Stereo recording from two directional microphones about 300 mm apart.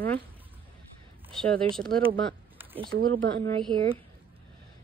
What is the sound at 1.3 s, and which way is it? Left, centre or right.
Speech, centre.